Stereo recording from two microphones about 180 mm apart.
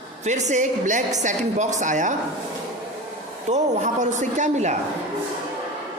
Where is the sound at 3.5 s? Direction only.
45° right (ahead or behind).